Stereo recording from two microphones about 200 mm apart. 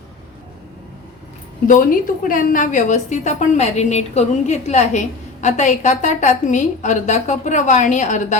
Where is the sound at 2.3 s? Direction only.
45° left (ahead or behind).